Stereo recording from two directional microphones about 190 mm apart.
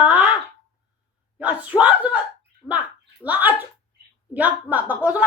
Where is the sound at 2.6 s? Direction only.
5° left (ahead or behind).